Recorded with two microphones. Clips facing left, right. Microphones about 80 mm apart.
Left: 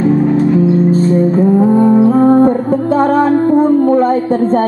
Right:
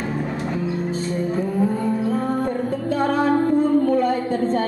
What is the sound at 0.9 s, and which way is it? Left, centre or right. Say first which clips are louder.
Music: left 12 dB; left.